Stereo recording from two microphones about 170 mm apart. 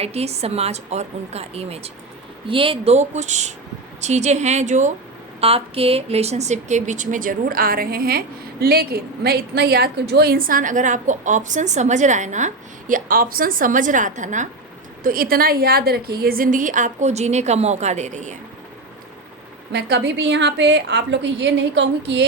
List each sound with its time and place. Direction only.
0.0 s a woman's voice: 40° right (ahead or behind)
15.0 s a woman's voice: 55° right (ahead or behind)
19.7 s a woman's voice: 80° right